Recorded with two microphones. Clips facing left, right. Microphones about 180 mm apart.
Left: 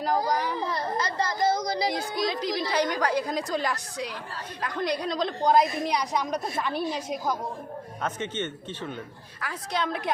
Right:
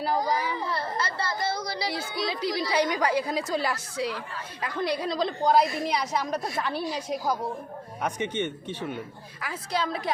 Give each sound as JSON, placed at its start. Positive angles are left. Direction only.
{"t": 0.0, "sound": "a woman's voice", "side_deg": -5}
{"t": 0.7, "sound": "speech", "side_deg": 15}
{"t": 1.5, "sound": "child singing", "side_deg": 20}
{"t": 2.2, "sound": "a woman's voice", "side_deg": -5}
{"t": 8.0, "sound": "speech", "side_deg": -15}